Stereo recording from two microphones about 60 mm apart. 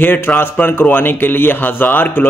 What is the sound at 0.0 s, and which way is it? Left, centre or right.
Speech, left.